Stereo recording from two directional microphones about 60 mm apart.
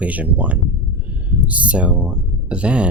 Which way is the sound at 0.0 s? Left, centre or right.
Right.